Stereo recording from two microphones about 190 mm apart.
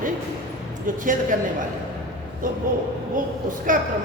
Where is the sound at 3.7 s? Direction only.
45° right (ahead or behind).